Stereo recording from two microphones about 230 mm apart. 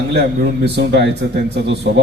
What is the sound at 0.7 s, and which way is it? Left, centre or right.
A man's voice, right.